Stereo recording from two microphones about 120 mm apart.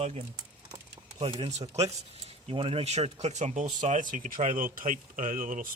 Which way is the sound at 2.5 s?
50° right (ahead or behind).